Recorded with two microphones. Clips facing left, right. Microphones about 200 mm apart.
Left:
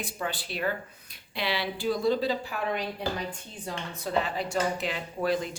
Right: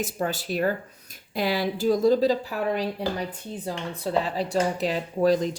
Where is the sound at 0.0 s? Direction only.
45° right (ahead or behind).